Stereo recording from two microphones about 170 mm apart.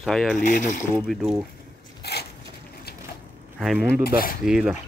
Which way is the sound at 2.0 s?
70° left (ahead or behind).